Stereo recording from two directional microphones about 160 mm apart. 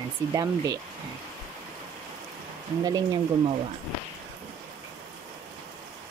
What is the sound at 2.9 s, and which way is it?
Speech, 25° right (ahead or behind).